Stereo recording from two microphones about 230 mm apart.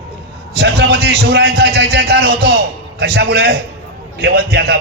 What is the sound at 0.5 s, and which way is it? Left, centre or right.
A man's voice, right.